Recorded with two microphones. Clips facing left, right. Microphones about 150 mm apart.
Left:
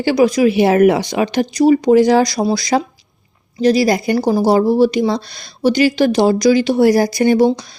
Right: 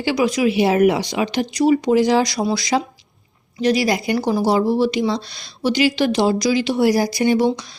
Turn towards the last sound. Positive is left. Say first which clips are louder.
# left 4 dB
turn(degrees=45)  # may be behind; listen again after turning